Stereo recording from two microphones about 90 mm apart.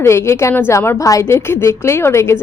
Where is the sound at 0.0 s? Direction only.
30° left (ahead or behind).